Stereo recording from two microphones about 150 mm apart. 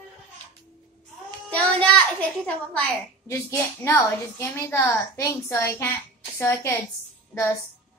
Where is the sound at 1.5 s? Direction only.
5° left (ahead or behind).